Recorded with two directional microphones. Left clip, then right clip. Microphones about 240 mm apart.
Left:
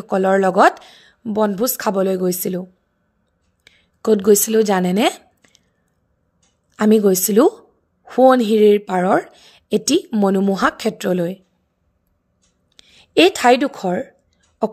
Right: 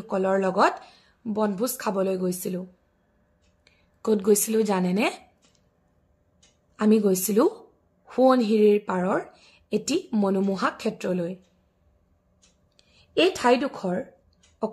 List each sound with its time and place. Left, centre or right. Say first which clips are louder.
0.0 s a woman's voice: left 8 dB; left
3.6 s a sound: left 8 dB; left
6.7 s a woman's voice: left 7 dB; left
12.7 s speech: left 9 dB; left